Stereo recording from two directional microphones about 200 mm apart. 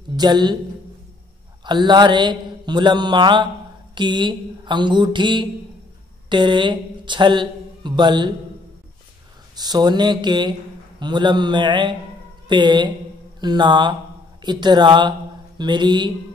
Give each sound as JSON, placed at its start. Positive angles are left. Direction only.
{"t": 0.1, "sound": "a man's voice", "side_deg": -20}
{"t": 1.6, "sound": "mantra", "side_deg": -20}
{"t": 6.2, "sound": "speech", "side_deg": -25}
{"t": 9.6, "sound": "mantra", "side_deg": -20}
{"t": 14.4, "sound": "speech", "side_deg": -20}